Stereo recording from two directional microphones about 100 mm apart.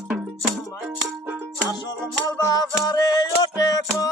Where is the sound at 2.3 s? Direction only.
35° left (ahead or behind).